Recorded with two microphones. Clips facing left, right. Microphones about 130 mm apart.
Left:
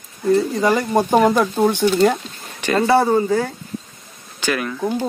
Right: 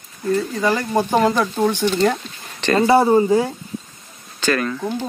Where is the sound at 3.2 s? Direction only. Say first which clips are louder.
Right 3 dB; 15° right (ahead or behind).